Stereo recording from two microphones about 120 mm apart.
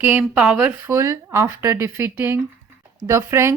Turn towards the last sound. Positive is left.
turn(degrees=-25)  # may be behind; listen again after turning